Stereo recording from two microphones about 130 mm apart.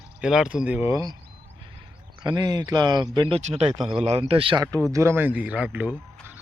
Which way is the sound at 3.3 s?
50° right (ahead or behind).